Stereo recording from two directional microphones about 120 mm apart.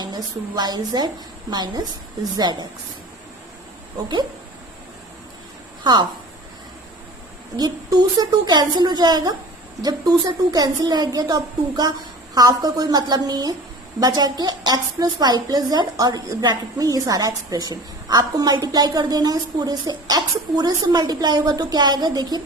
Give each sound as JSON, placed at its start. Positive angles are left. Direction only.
{"t": 0.0, "sound": "a woman's voice", "side_deg": -35}
{"t": 5.8, "sound": "a woman's voice", "side_deg": -40}
{"t": 7.5, "sound": "a woman's voice", "side_deg": -35}